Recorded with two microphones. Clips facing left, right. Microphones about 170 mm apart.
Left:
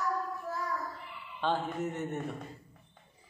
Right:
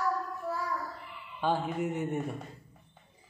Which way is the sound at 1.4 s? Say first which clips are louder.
Right 2 dB; 10° right (ahead or behind).